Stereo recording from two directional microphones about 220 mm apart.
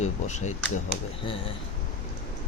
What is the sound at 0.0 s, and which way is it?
Speech, 30° left (ahead or behind).